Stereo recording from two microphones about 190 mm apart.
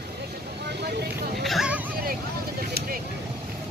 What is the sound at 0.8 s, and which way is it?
Vehicle, 60° right (ahead or behind).